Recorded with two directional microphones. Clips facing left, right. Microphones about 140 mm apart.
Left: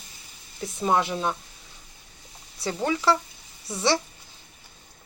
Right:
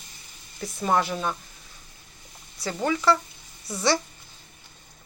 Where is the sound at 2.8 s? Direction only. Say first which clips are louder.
Right 1 dB; 30° left (ahead or behind).